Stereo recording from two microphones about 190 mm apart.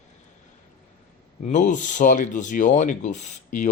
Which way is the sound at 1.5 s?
40° left (ahead or behind).